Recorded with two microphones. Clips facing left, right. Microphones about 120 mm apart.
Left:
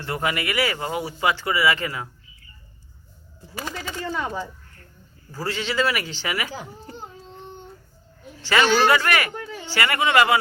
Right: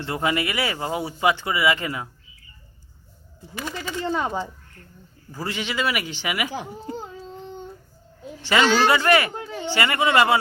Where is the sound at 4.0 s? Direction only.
25° right (ahead or behind).